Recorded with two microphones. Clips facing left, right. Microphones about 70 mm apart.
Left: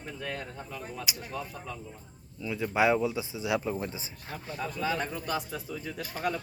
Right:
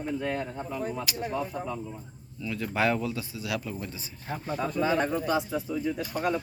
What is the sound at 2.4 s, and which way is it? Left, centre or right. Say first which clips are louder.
Speech: left 1 dB; centre.